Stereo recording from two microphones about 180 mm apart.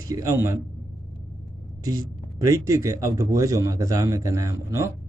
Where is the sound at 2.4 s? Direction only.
15° right (ahead or behind).